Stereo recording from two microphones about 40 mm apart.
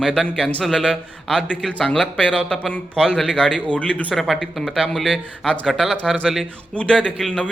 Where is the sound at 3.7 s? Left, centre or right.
Left.